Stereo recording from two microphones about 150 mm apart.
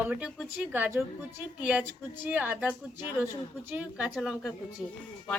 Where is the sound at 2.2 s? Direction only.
10° right (ahead or behind).